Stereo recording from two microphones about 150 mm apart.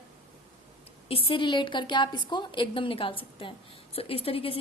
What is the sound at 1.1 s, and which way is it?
A woman's voice, 40° left (ahead or behind).